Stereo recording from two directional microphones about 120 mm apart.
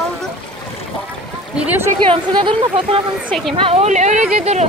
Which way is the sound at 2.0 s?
45° right (ahead or behind).